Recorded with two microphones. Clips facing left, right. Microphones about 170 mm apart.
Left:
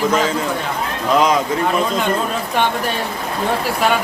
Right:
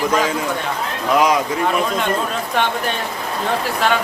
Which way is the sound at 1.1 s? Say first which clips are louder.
Left 1 dB; 10° right (ahead or behind).